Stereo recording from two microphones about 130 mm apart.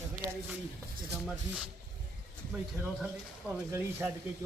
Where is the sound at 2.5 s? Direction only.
15° right (ahead or behind).